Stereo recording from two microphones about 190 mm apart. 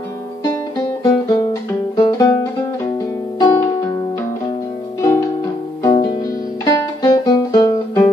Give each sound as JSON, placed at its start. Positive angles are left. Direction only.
{"t": 1.0, "sound": "music", "side_deg": 20}
{"t": 3.3, "sound": "music", "side_deg": 20}
{"t": 5.8, "sound": "music", "side_deg": 20}